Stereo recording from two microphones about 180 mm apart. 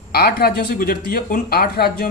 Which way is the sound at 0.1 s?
60° left (ahead or behind).